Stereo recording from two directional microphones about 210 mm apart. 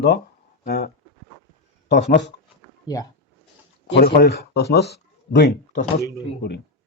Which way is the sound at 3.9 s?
45° left (ahead or behind).